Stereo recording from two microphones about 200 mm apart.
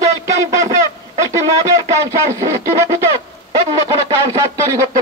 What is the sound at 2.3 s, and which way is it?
Speech, 15° right (ahead or behind).